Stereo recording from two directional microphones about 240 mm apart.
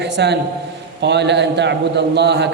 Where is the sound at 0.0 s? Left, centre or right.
Right.